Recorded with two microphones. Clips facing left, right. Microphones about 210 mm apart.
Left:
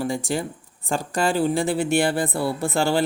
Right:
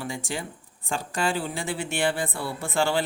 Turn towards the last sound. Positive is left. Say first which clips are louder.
# left 4 dB
turn(degrees=40)  # may be behind; listen again after turning